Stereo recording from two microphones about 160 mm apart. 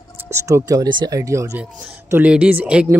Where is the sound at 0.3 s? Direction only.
20° right (ahead or behind).